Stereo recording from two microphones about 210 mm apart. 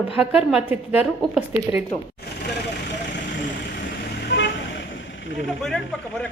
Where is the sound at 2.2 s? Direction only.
55° left (ahead or behind).